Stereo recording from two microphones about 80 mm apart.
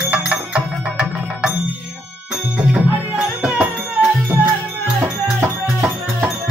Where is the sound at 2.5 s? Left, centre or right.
Centre.